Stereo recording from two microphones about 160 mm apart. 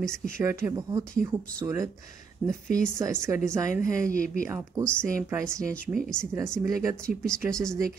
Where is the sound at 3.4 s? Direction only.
20° right (ahead or behind).